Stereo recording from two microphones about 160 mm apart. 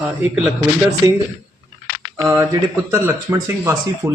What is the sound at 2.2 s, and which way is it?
Speech, 20° right (ahead or behind).